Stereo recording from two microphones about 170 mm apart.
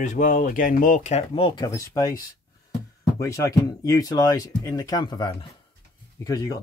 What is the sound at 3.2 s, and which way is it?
Speech, 20° left (ahead or behind).